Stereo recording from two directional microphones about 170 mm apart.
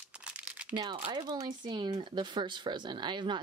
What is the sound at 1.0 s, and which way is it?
Speech, 25° right (ahead or behind).